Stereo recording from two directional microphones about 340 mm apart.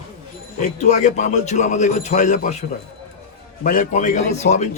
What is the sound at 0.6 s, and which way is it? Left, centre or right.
A man's voice, left.